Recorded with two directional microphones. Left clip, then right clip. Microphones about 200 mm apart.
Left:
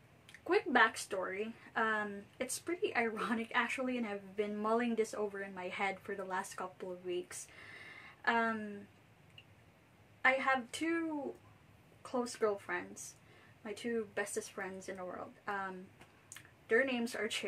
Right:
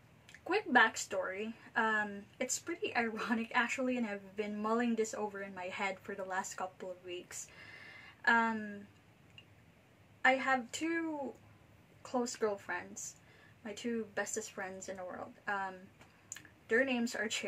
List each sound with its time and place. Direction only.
0.5 s a woman's voice: 10° left (ahead or behind)
10.2 s a woman's voice: 10° left (ahead or behind)
12.0 s a woman's voice: 5° left (ahead or behind)